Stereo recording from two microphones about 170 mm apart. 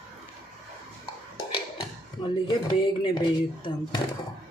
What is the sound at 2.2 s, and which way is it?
Speech, 30° left (ahead or behind).